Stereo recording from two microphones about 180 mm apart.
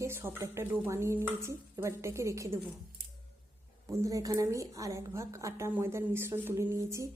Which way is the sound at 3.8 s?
20° right (ahead or behind).